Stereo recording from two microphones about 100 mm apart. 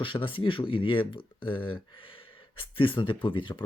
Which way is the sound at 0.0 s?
55° left (ahead or behind).